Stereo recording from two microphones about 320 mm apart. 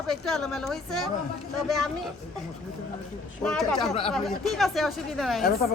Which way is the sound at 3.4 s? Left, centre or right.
Centre.